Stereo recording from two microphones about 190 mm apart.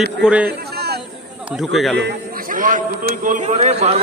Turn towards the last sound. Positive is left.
turn(degrees=-35)  # may be behind; listen again after turning